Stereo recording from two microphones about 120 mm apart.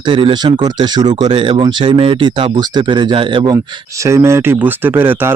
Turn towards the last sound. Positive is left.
turn(degrees=-20)  # may be behind; listen again after turning